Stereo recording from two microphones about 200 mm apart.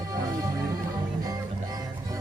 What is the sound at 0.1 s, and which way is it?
Music, 15° right (ahead or behind).